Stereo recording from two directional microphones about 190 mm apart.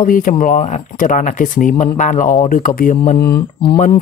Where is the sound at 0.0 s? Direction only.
45° left (ahead or behind).